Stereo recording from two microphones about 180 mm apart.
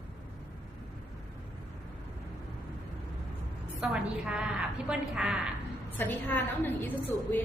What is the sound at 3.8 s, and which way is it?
A woman's voice, 5° right (ahead or behind).